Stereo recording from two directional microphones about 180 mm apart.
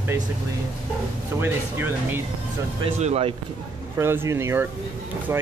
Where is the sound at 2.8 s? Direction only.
35° right (ahead or behind).